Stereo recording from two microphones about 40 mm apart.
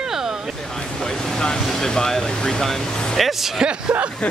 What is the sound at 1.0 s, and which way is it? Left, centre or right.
Speech, centre.